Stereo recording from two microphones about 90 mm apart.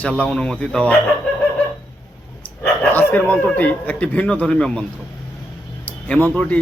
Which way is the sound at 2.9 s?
20° left (ahead or behind).